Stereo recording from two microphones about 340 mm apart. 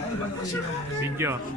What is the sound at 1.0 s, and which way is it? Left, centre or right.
Speech, centre.